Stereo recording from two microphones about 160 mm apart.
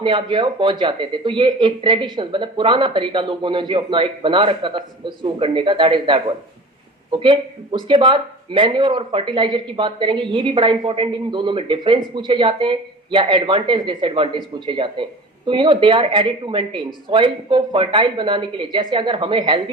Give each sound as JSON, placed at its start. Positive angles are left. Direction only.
{"t": 0.0, "sound": "speech", "side_deg": -30}